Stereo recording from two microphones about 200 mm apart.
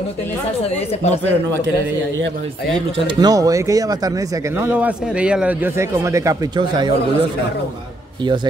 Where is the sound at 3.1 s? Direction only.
20° right (ahead or behind).